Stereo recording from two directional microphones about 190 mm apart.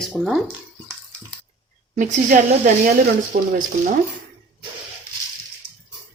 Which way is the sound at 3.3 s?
50° right (ahead or behind).